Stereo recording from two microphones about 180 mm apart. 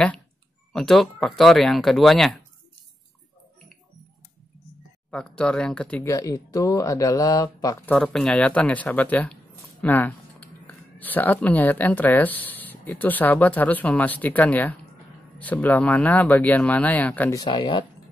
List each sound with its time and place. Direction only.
0.7 s speech: centre (ahead or behind)
5.1 s speech: 5° left (ahead or behind)
6.0 s speech: 20° left (ahead or behind)
17.4 s speech: 25° left (ahead or behind)